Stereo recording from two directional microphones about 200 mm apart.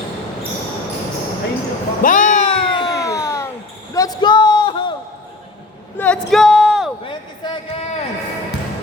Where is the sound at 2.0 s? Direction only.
40° left (ahead or behind).